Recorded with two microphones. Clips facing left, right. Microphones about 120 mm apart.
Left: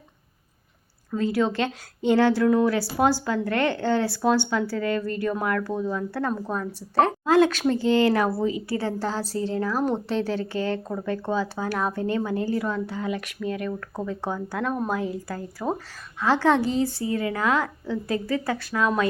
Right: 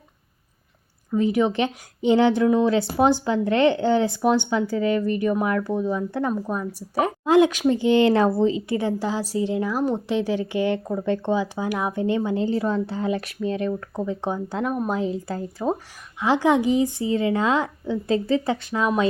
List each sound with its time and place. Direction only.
1.1 s a woman's voice: 15° right (ahead or behind)